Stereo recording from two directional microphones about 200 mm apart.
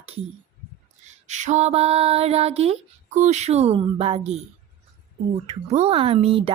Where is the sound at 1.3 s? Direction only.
35° right (ahead or behind).